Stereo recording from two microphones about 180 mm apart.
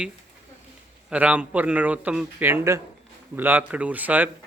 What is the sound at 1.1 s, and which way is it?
Speech, 5° right (ahead or behind).